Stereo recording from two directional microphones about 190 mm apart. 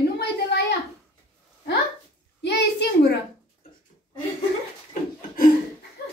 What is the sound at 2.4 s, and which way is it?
Speech, 60° left (ahead or behind).